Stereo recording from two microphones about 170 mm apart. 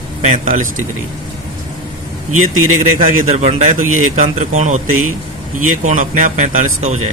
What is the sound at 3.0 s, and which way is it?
A man's voice, 40° right (ahead or behind).